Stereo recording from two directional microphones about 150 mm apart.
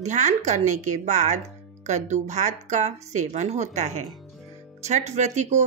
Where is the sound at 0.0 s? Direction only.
50° right (ahead or behind).